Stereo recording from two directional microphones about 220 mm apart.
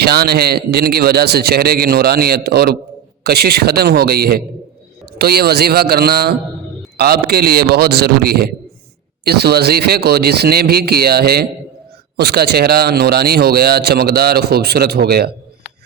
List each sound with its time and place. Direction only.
0.0 s speech: 45° right (ahead or behind)